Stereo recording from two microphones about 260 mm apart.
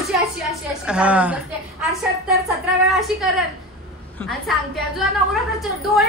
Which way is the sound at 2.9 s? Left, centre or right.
Centre.